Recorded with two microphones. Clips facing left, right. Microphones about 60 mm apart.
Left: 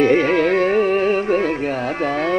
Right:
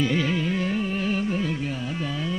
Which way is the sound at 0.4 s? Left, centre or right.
Left.